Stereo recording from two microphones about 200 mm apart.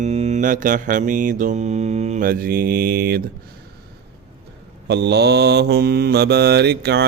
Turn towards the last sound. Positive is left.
turn(degrees=-55)  # may be behind; listen again after turning